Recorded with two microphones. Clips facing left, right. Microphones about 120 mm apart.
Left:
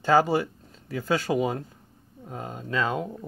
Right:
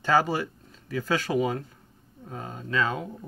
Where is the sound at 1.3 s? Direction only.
10° left (ahead or behind).